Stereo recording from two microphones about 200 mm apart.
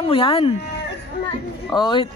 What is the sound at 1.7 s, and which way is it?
Speech, 20° left (ahead or behind).